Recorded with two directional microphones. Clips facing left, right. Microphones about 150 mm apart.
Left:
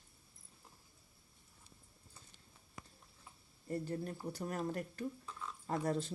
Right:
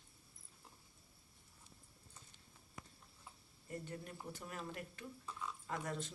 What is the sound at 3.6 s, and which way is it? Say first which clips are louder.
Speech: left 8 dB; 35° left (ahead or behind).